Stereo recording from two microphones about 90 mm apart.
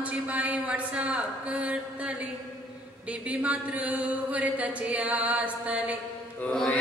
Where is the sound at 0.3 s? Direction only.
15° right (ahead or behind).